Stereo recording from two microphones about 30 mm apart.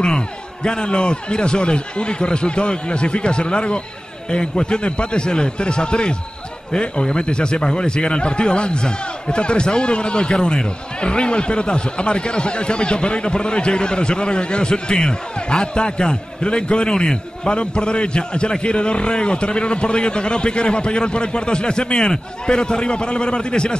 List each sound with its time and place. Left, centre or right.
0.7 s a man's voice: left